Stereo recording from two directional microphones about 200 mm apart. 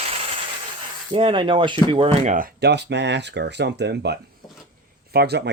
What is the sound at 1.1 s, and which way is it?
Speech, 25° right (ahead or behind).